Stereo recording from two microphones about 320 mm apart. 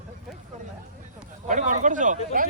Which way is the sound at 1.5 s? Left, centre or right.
Right.